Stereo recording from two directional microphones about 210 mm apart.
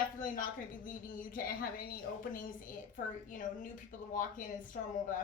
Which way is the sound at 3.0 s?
40° left (ahead or behind).